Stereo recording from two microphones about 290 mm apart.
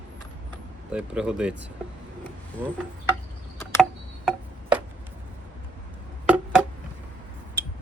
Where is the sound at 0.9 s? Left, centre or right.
Centre.